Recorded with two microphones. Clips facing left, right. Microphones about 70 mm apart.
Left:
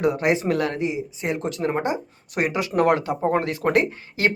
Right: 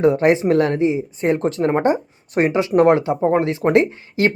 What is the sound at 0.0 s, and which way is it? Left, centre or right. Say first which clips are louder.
Speech: right 6 dB; right.